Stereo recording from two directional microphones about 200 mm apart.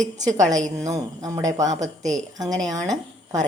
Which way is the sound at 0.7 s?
15° right (ahead or behind).